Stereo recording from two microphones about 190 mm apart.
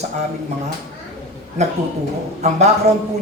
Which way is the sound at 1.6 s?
35° right (ahead or behind).